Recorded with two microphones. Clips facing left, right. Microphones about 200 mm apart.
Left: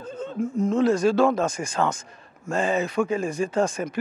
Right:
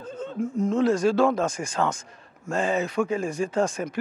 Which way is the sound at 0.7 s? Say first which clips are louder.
Left 1 dB; 20° left (ahead or behind).